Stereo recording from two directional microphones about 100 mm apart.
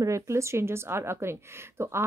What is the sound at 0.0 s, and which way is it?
A woman's voice, 30° right (ahead or behind).